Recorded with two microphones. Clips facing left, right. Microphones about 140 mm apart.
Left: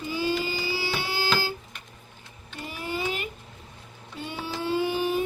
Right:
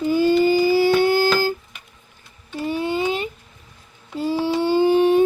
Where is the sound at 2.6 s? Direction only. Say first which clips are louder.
Right 9 dB; 30° right (ahead or behind).